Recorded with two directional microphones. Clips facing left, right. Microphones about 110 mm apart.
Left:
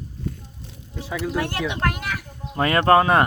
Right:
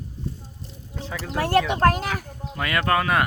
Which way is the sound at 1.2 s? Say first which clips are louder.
Right 4 dB; 35° right (ahead or behind).